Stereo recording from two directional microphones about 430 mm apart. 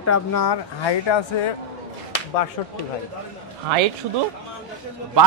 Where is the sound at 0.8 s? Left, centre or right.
Left.